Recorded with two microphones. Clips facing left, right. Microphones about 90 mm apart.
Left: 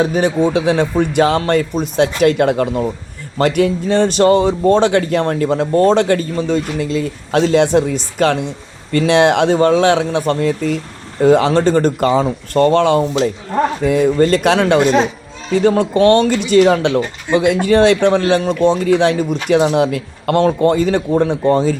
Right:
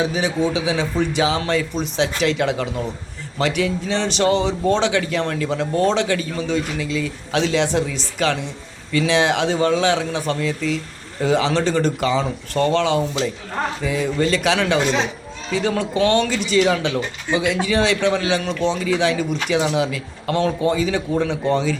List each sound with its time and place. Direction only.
0.0 s speech: 55° left (ahead or behind)